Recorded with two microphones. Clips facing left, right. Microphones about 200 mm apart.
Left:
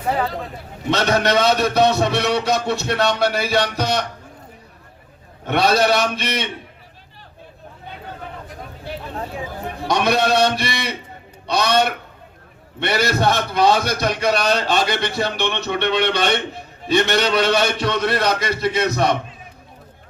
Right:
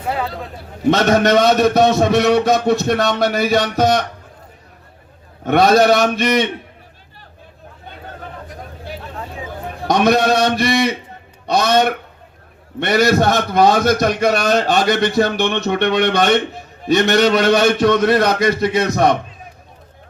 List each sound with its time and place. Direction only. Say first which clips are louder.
0.1 s speech: left 1 dB; centre (ahead or behind)
0.9 s a man's voice: right 5 dB; 50° right (ahead or behind)
5.5 s a man's voice: right 5 dB; 50° right (ahead or behind)
9.8 s a man's voice: right 4 dB; 50° right (ahead or behind)